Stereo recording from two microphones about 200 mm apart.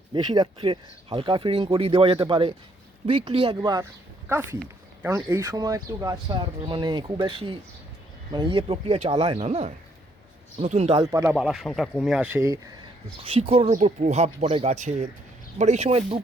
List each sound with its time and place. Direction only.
0.1 s speech: 20° right (ahead or behind)
5.0 s speech: 15° right (ahead or behind); by 11.0 s 30° right (ahead or behind)
11.0 s speech: 15° right (ahead or behind)
11.3 s speech: centre (ahead or behind)
13.2 s speech: 30° right (ahead or behind)